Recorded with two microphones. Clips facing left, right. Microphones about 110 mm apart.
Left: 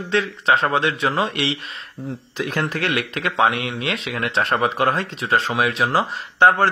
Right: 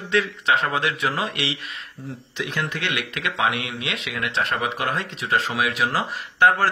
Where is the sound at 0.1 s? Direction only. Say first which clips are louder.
Left 2 dB; 30° left (ahead or behind).